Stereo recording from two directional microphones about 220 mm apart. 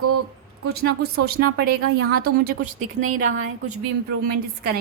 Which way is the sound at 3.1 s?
70° right (ahead or behind).